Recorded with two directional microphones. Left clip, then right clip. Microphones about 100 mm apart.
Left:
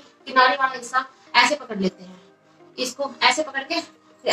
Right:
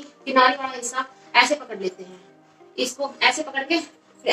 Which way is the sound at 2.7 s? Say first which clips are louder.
Right 1 dB; 30° left (ahead or behind).